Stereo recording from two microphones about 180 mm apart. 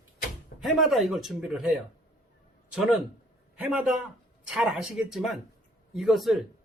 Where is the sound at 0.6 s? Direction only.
Centre (ahead or behind).